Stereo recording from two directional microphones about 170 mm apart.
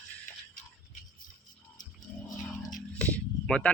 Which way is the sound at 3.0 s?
5° left (ahead or behind).